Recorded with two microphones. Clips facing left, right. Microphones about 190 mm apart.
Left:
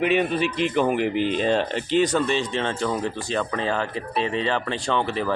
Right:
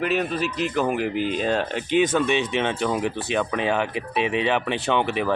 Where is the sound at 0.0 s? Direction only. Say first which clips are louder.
Left 3 dB; centre (ahead or behind).